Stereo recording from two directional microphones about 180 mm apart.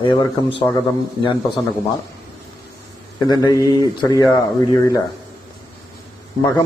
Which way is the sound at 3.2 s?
20° left (ahead or behind).